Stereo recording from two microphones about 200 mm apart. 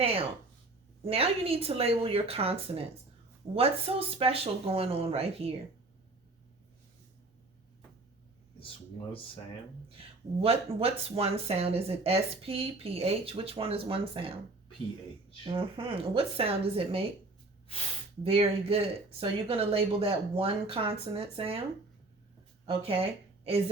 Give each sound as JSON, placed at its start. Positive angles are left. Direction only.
{"t": 0.0, "sound": "a sound", "side_deg": -30}
{"t": 1.0, "sound": "speech", "side_deg": -30}
{"t": 10.4, "sound": "speech", "side_deg": -30}
{"t": 15.4, "sound": "speech", "side_deg": -25}
{"t": 18.2, "sound": "speech", "side_deg": -30}
{"t": 22.6, "sound": "speech", "side_deg": -25}